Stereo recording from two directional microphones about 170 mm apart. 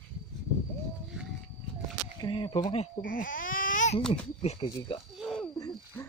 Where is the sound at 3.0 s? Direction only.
50° left (ahead or behind).